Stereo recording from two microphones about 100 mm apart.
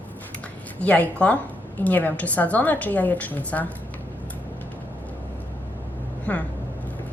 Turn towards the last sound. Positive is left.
turn(degrees=15)  # may be behind; listen again after turning